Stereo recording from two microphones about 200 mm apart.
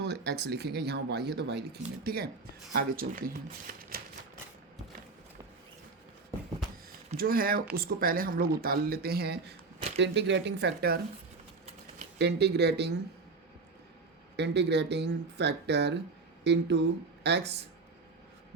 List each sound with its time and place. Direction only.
0.0 s speech: 55° right (ahead or behind)
7.2 s speech: 50° right (ahead or behind)
12.2 s speech: 55° right (ahead or behind)
14.3 s speech: 60° right (ahead or behind)